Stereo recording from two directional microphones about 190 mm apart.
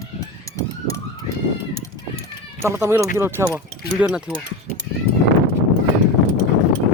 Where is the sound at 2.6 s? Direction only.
15° right (ahead or behind).